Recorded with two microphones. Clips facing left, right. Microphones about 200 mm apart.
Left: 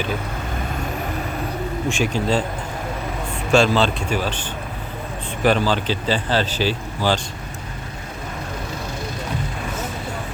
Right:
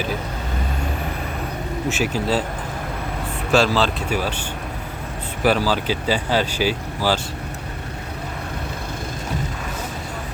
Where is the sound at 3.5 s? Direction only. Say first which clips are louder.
Left 1 dB; centre (ahead or behind).